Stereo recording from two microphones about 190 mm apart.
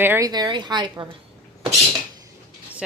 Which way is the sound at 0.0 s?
15° right (ahead or behind).